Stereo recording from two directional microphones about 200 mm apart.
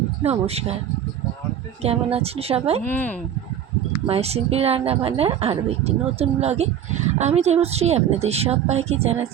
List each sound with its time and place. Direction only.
0.2 s a woman's voice: 30° right (ahead or behind)
1.8 s a woman's voice: 30° right (ahead or behind)
2.8 s speech: 10° left (ahead or behind)
4.0 s a woman's voice: 30° right (ahead or behind)